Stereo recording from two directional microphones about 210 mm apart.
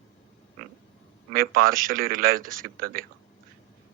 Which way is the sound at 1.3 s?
45° right (ahead or behind).